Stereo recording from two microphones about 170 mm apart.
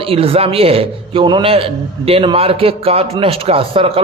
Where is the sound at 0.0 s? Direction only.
35° right (ahead or behind).